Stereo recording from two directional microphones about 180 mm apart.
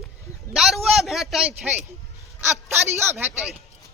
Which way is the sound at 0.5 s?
Centre (ahead or behind).